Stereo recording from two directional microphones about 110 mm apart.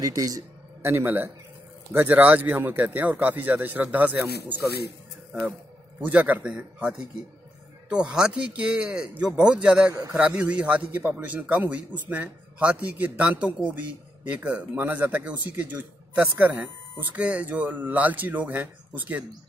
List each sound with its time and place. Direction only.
0.0 s a man's voice: 30° right (ahead or behind)
0.8 s a man's voice: 20° right (ahead or behind)
5.9 s a man's voice: 15° right (ahead or behind)